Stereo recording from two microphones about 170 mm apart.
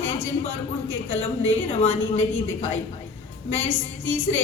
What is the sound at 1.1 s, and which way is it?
Speech, 10° left (ahead or behind).